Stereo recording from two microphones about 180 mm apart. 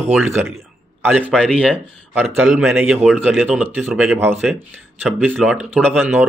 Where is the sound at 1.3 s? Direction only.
Centre (ahead or behind).